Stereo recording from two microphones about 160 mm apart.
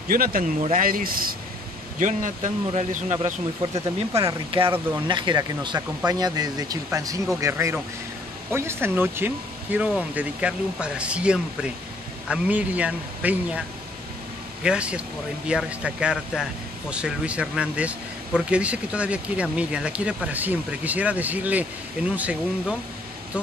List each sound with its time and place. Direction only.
0.1 s speech: 65° right (ahead or behind)
2.0 s speech: 55° right (ahead or behind)
3.7 s speech: 20° right (ahead or behind)
4.2 s speech: 35° right (ahead or behind); by 13.6 s 10° right (ahead or behind)
14.6 s speech: 5° right (ahead or behind)